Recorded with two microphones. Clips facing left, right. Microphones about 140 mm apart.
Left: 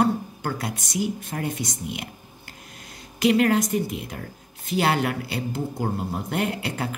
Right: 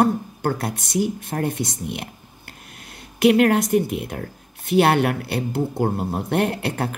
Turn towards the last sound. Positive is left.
turn(degrees=-55)  # may be behind; listen again after turning